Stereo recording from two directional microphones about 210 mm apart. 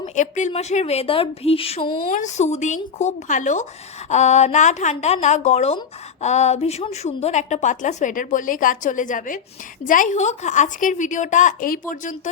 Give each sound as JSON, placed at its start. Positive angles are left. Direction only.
{"t": 0.0, "sound": "a woman's voice", "side_deg": 35}
{"t": 2.0, "sound": "a woman's voice", "side_deg": 35}